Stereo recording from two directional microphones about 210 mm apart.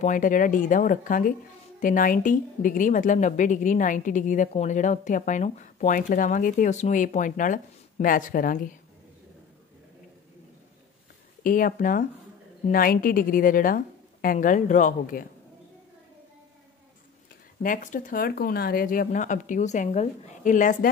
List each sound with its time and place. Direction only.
0.0 s speech: 40° left (ahead or behind)
11.4 s speech: 40° left (ahead or behind)
17.6 s speech: 40° left (ahead or behind)